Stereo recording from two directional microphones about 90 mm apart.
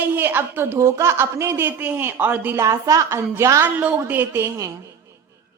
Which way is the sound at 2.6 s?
35° right (ahead or behind).